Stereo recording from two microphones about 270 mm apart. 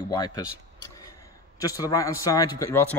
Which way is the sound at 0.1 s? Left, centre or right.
Centre.